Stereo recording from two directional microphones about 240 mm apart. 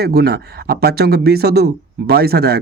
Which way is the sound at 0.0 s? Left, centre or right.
Right.